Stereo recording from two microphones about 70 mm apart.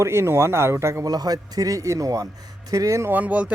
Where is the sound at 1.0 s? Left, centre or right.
Right.